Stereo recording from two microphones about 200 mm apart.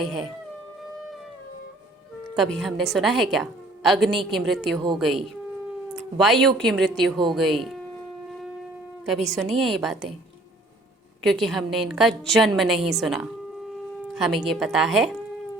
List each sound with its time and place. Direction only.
0.0 s a woman's voice: centre (ahead or behind)
2.2 s a woman's voice: centre (ahead or behind)
4.1 s a woman's voice: 25° right (ahead or behind)
4.4 s a woman's voice: centre (ahead or behind)
9.6 s a woman's voice: centre (ahead or behind)
11.2 s a woman's voice: centre (ahead or behind)